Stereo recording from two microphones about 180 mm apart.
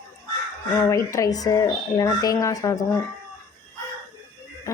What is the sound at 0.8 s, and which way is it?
Speech, 15° left (ahead or behind).